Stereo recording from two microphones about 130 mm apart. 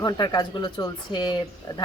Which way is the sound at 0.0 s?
35° left (ahead or behind).